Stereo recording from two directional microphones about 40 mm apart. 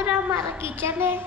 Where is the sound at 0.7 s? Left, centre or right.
Right.